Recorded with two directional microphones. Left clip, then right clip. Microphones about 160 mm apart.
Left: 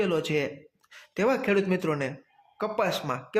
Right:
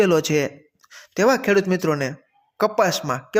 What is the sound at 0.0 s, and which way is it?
Speech, 35° right (ahead or behind).